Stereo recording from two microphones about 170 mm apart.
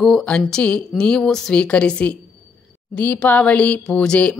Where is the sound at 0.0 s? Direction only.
5° left (ahead or behind).